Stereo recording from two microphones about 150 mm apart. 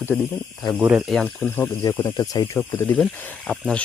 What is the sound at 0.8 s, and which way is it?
Speech, 10° right (ahead or behind).